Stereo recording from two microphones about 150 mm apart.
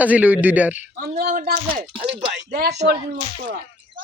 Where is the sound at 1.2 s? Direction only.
70° right (ahead or behind).